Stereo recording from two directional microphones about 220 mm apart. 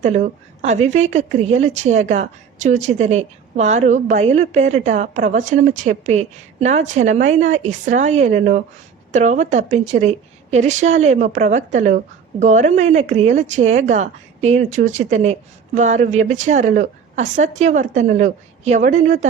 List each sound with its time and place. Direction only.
0.0 s a woman's voice: 30° right (ahead or behind)